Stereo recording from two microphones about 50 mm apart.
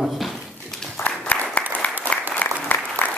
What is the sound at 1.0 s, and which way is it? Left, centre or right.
Applause, left.